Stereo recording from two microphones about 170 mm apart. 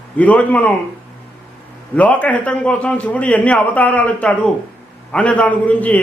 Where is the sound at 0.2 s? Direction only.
10° left (ahead or behind).